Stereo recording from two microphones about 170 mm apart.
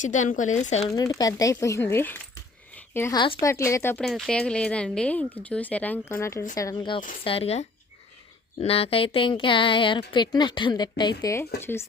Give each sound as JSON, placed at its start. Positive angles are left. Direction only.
{"t": 0.0, "sound": "speech", "side_deg": 45}
{"t": 0.9, "sound": "speech", "side_deg": 20}
{"t": 2.7, "sound": "a sound", "side_deg": 15}
{"t": 3.4, "sound": "speech", "side_deg": 15}
{"t": 4.0, "sound": "speech", "side_deg": 0}